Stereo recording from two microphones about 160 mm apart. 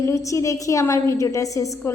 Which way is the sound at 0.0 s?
20° left (ahead or behind).